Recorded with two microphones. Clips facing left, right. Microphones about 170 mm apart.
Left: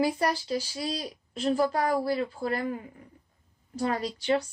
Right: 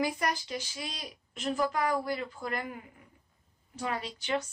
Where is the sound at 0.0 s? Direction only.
30° left (ahead or behind).